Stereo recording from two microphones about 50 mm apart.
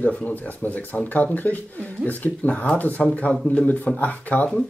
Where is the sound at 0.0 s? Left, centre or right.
Left.